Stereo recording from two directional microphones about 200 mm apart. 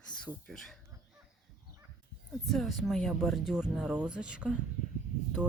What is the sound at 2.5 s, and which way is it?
Speech, centre (ahead or behind).